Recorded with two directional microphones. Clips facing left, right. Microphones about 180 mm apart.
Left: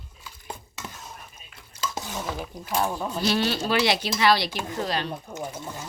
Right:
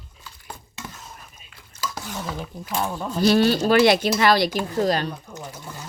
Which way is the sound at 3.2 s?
45° right (ahead or behind).